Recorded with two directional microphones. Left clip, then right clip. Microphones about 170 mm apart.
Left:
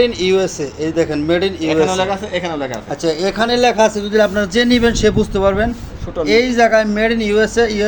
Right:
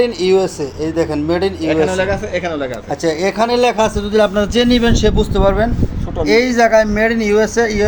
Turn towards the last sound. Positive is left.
turn(degrees=-5)  # may be behind; listen again after turning